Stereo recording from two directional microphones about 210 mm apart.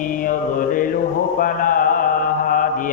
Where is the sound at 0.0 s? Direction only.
40° left (ahead or behind).